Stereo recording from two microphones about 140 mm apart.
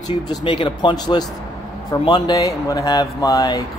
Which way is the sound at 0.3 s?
35° left (ahead or behind).